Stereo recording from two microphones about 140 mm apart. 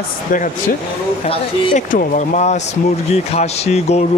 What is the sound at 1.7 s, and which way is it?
Speech, 65° left (ahead or behind).